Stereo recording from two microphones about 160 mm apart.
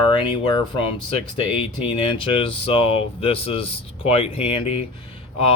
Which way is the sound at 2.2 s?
35° left (ahead or behind).